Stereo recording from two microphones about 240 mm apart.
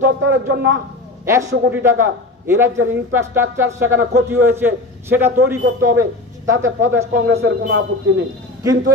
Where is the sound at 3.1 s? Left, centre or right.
Centre.